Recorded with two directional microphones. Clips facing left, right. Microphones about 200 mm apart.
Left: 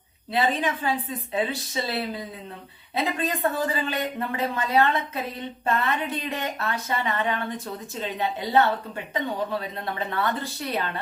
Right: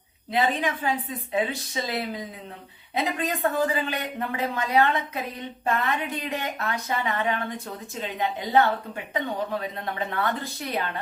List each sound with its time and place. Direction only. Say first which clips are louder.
0.3 s a man's voice: even; 15° right (ahead or behind)